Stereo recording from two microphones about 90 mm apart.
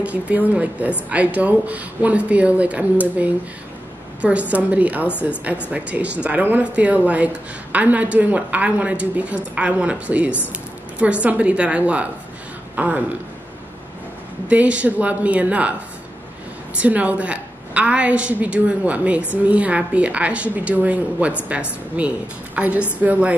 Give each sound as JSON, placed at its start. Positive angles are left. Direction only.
{"t": 0.0, "sound": "a woman's voice", "side_deg": -15}
{"t": 14.5, "sound": "a woman's voice", "side_deg": -15}
{"t": 16.8, "sound": "a woman's voice", "side_deg": -15}